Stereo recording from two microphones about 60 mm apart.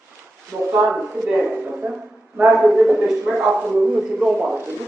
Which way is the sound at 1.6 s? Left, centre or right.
Right.